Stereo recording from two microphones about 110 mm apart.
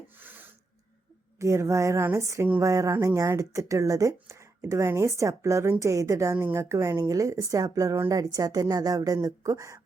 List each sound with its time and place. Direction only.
0.2 s rub: 20° right (ahead or behind)
1.4 s speech: 25° right (ahead or behind)